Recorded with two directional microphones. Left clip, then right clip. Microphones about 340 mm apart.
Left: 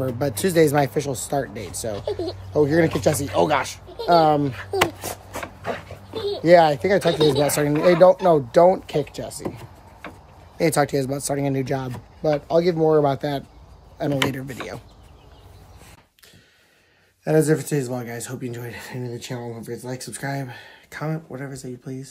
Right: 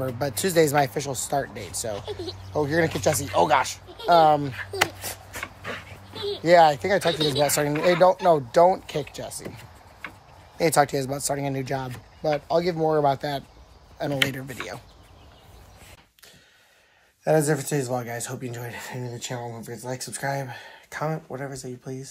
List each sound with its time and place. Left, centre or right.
0.0 s speech: centre
4.7 s a sound: left
6.4 s speech: centre
10.6 s speech: centre
17.2 s speech: centre